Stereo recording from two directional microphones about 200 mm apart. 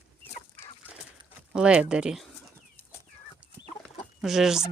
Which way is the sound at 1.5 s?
5° right (ahead or behind).